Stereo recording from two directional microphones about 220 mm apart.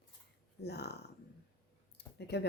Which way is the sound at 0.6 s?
50° left (ahead or behind).